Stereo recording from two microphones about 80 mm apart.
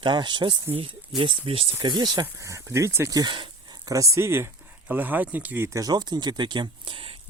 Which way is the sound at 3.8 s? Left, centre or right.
Right.